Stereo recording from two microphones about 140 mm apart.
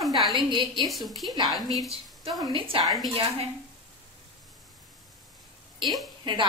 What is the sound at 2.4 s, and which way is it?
Speech, 35° right (ahead or behind).